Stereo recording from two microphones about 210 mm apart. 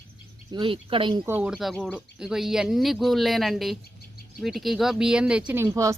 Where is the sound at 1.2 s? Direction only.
10° right (ahead or behind).